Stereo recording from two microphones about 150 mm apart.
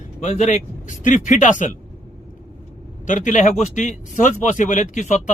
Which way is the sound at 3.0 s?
55° left (ahead or behind).